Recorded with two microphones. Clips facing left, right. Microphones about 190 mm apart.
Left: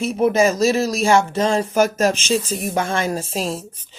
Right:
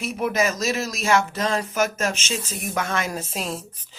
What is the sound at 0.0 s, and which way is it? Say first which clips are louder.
Speech: left 7 dB; 30° left (ahead or behind).